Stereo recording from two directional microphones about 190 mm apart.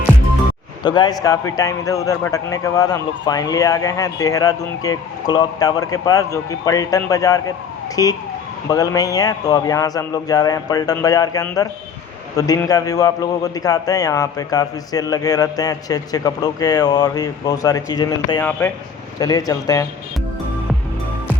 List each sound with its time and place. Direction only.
0.8 s a man's voice: 20° left (ahead or behind)